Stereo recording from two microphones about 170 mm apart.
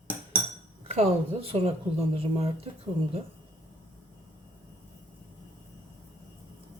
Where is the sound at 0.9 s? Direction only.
35° right (ahead or behind).